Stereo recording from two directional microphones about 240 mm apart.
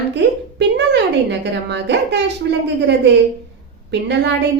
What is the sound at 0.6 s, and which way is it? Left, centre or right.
A woman's voice, right.